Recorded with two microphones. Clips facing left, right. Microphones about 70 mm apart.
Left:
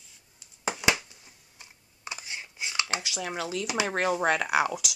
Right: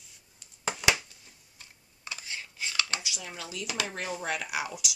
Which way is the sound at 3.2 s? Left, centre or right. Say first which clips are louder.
Left 8 dB; left.